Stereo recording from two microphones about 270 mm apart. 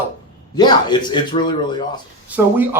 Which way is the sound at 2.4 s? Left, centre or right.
Centre.